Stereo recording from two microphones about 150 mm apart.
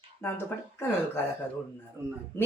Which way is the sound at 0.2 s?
15° left (ahead or behind).